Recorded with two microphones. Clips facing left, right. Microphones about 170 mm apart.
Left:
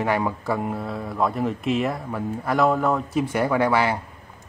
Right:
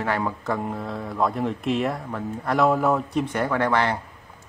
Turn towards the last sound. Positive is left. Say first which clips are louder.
# left 2 dB
turn(degrees=10)  # may be behind; listen again after turning